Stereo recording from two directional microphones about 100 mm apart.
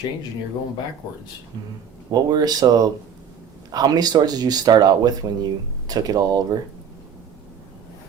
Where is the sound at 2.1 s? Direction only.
40° right (ahead or behind).